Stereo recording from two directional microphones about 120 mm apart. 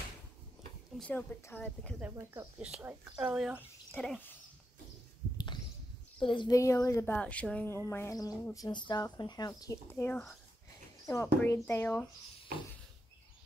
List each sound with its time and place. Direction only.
0.9 s a woman's voice: 10° left (ahead or behind)
2.0 s speech: 15° right (ahead or behind)
3.3 s speech: 5° right (ahead or behind)
6.1 s a woman's voice: 40° left (ahead or behind)
6.5 s speech: 25° left (ahead or behind)
7.1 s a woman's voice: 10° left (ahead or behind)
7.7 s speech: 20° left (ahead or behind)
9.8 s a woman's voice: 15° left (ahead or behind)